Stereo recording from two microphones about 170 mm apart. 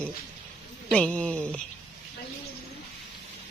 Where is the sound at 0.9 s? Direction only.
5° left (ahead or behind).